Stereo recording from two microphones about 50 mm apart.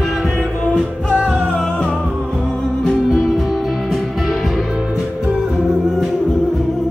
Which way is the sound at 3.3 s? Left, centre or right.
Centre.